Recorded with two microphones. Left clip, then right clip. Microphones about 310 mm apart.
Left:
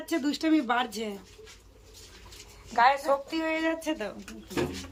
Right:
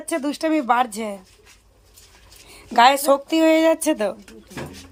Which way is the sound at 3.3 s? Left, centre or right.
Right.